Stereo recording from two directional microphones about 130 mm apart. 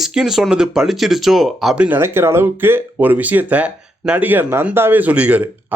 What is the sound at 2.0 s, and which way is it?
A man's voice, 20° right (ahead or behind).